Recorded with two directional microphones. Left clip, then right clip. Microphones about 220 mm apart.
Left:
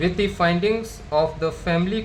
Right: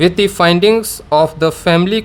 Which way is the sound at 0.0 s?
50° right (ahead or behind).